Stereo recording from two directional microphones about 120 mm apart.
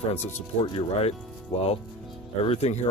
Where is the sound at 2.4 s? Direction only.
60° left (ahead or behind).